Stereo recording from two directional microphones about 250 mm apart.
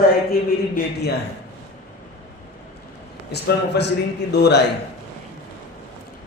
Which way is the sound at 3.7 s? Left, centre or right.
Left.